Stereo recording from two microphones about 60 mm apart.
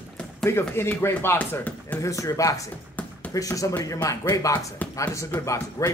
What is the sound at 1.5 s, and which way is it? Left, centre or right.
Speech, left.